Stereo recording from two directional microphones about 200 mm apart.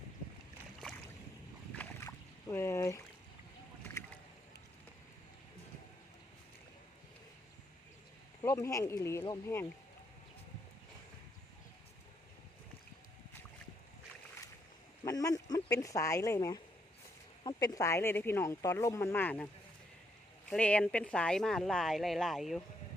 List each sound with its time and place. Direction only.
1.7 s boat: 10° left (ahead or behind)
8.4 s speech: 15° left (ahead or behind)
15.0 s speech: 15° left (ahead or behind)
20.5 s speech: 5° left (ahead or behind)